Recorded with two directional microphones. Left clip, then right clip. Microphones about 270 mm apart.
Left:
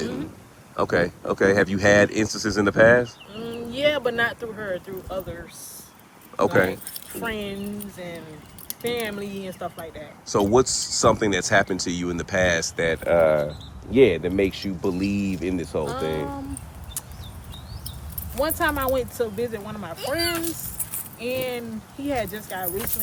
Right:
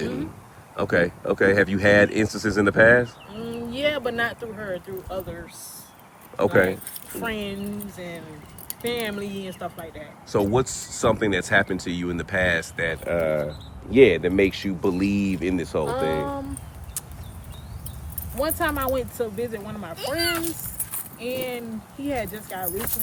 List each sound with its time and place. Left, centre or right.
0.8 s speech: centre
13.1 s speech: left
13.4 s speech: centre
18.3 s speech: centre